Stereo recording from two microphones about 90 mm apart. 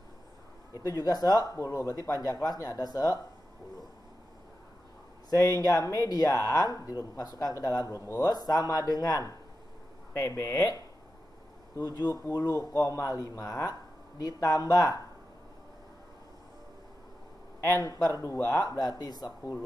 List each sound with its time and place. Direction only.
0.8 s speech: 45° left (ahead or behind)
5.3 s speech: 40° left (ahead or behind)
11.8 s speech: 50° left (ahead or behind)
12.3 s speech: 35° left (ahead or behind)
17.7 s speech: 40° left (ahead or behind)